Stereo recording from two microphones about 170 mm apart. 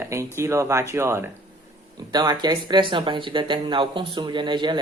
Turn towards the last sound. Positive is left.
turn(degrees=-25)  # may be behind; listen again after turning